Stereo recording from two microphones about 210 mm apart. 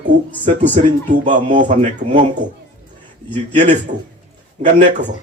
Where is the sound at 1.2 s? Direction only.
35° right (ahead or behind).